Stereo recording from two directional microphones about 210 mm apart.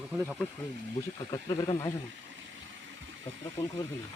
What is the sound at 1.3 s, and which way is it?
Speech, 15° left (ahead or behind).